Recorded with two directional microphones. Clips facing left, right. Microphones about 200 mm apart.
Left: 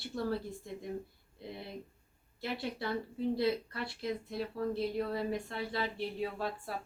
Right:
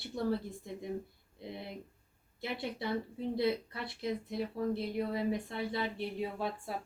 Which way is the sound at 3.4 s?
20° right (ahead or behind).